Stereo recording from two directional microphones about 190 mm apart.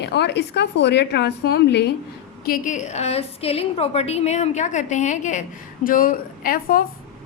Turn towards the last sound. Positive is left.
turn(degrees=50)  # may be behind; listen again after turning